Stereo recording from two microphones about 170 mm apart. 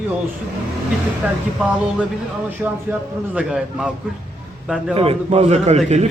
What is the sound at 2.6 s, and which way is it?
Speech, 10° right (ahead or behind).